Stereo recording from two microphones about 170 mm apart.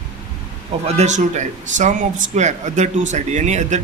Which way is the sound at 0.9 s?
45° right (ahead or behind).